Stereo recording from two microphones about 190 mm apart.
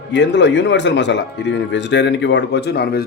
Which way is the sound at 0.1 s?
70° left (ahead or behind).